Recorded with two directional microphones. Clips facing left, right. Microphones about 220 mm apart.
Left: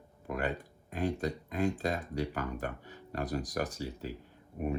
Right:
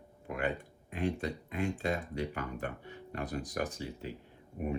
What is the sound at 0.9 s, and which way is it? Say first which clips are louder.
Speech: left 1 dB; 40° left (ahead or behind).